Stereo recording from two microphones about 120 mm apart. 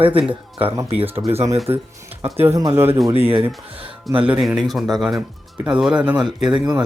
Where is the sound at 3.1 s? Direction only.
50° right (ahead or behind).